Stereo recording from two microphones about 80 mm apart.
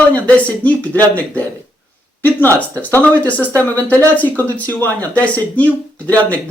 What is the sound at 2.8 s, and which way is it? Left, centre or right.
Speech, left.